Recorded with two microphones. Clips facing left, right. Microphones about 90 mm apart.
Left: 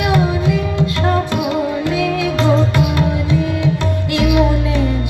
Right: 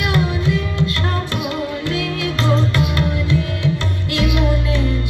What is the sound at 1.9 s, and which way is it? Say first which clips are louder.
Music: left 5 dB; 60° left (ahead or behind).